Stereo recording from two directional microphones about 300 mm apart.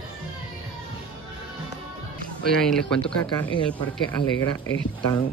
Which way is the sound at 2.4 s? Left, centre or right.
Centre.